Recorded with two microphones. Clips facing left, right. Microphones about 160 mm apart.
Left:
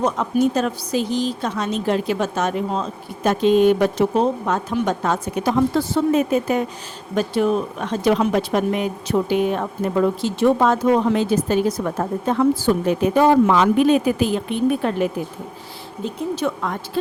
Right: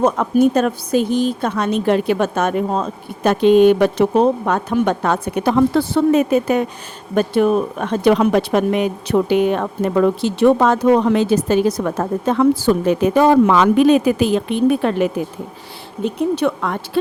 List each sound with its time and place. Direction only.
0.0 s a woman's voice: 55° right (ahead or behind)
7.2 s speech: 55° right (ahead or behind); by 15.1 s 80° right
16.0 s speech: 65° right (ahead or behind)